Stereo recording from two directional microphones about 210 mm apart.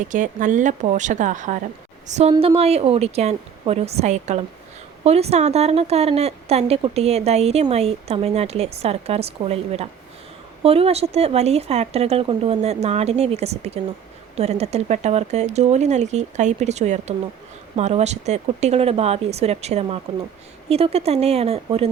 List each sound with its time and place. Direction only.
0.1 s speech: 35° right (ahead or behind)
2.3 s a woman's voice: 25° right (ahead or behind)